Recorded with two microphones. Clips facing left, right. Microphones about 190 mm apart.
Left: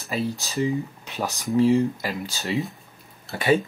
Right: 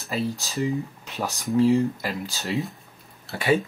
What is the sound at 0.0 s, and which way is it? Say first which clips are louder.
Speech: even; centre (ahead or behind).